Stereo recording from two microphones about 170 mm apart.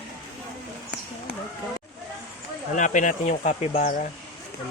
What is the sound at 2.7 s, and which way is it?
Speech, 50° left (ahead or behind).